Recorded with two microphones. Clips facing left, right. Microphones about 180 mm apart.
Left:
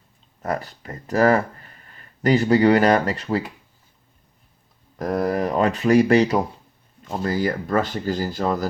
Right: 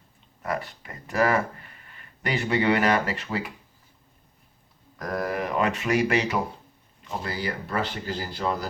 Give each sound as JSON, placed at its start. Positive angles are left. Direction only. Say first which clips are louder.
{"t": 0.4, "sound": "speech", "louder": "left 4 dB", "side_deg": 40}
{"t": 4.9, "sound": "speech", "louder": "left 6 dB", "side_deg": 35}